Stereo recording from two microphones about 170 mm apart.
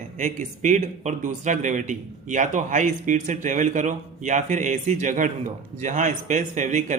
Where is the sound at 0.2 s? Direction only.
45° right (ahead or behind).